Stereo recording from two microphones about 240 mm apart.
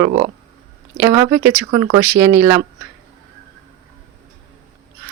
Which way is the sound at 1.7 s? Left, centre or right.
Centre.